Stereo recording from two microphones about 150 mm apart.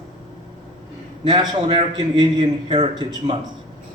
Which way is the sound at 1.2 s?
30° right (ahead or behind).